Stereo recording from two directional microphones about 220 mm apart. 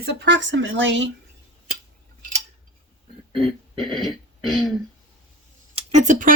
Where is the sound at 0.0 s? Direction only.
50° right (ahead or behind).